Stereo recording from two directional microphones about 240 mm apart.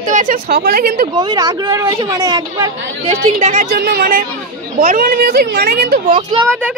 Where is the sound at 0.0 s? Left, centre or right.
Right.